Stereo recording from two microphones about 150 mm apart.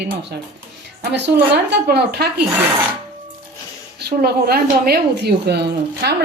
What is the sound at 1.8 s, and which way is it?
Speech, 90° right.